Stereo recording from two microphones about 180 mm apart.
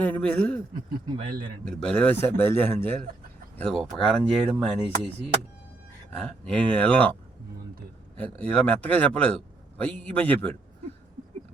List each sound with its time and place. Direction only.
0.0 s a man's voice: 5° left (ahead or behind)
1.0 s a man's voice: 25° right (ahead or behind)
1.6 s a man's voice: 5° left (ahead or behind)
6.1 s a man's voice: 5° left (ahead or behind)
8.2 s a man's voice: 5° left (ahead or behind)